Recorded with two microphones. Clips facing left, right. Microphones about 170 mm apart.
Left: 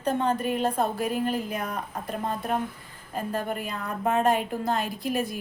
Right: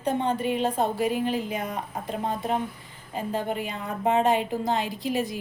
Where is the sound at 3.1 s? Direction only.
15° right (ahead or behind).